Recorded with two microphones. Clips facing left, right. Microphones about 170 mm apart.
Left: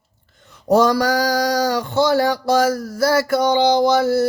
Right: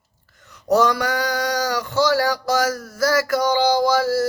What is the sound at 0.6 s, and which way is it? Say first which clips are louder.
Speech: left 3 dB; 30° left (ahead or behind).